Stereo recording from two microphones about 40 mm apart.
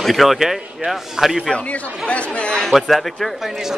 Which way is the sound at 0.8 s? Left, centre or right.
Right.